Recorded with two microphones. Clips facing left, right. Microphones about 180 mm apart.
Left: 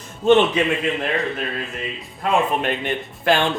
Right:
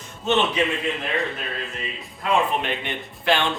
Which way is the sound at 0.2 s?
50° left (ahead or behind).